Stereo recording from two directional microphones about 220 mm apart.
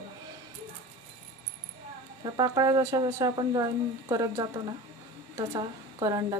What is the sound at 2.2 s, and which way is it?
Speech, 20° right (ahead or behind).